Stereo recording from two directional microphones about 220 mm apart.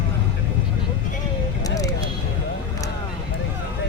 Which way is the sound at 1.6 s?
15° left (ahead or behind).